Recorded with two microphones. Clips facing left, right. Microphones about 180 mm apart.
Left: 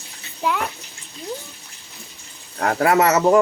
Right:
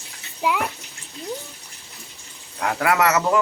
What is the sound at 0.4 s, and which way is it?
Speech, 10° right (ahead or behind).